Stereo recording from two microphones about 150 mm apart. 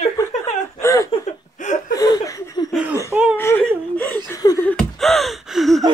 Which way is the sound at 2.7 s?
5° right (ahead or behind).